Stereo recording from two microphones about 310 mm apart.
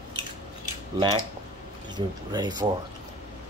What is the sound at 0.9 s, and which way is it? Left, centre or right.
A man's voice, centre.